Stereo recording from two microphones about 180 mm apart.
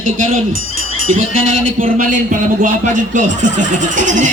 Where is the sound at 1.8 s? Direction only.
45° right (ahead or behind).